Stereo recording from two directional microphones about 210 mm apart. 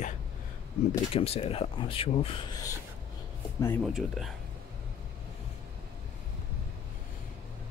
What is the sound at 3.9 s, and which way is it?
Speech, centre (ahead or behind).